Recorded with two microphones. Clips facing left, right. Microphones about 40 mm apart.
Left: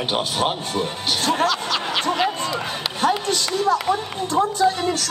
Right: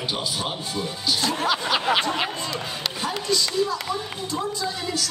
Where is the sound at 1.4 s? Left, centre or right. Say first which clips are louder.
Left 2 dB; centre.